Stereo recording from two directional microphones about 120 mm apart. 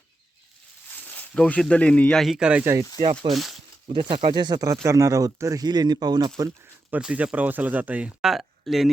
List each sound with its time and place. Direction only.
1.0 s speech: 10° left (ahead or behind)
3.8 s speech: 45° right (ahead or behind)
6.9 s speech: 10° right (ahead or behind)